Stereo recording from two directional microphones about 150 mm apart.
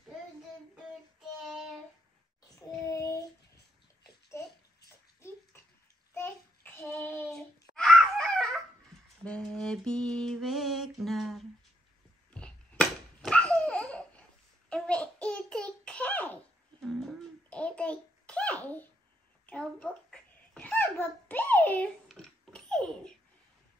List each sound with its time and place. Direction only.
2.9 s child singing: 20° left (ahead or behind)
6.1 s child singing: 15° left (ahead or behind)
7.7 s babbling: 5° left (ahead or behind)
9.2 s mantra: 5° left (ahead or behind)
12.3 s a sound: 5° left (ahead or behind)
19.4 s babbling: 10° left (ahead or behind)